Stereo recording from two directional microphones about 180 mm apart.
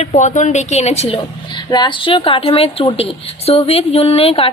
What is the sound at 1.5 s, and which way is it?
Speech, 25° left (ahead or behind).